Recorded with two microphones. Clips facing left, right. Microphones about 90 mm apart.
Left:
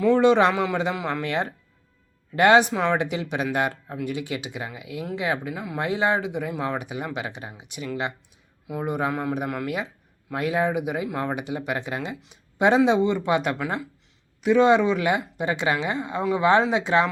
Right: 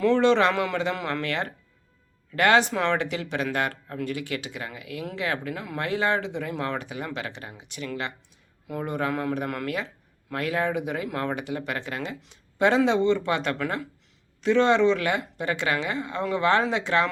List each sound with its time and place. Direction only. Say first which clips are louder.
0.0 s speech: left 2 dB; 10° left (ahead or behind)
0.5 s a man's voice: left 2 dB; 5° left (ahead or behind)
1.0 s speech: left 2 dB; 15° left (ahead or behind)
2.7 s speech: left 2 dB; 5° left (ahead or behind)
3.0 s speech: left 2 dB; 20° left (ahead or behind)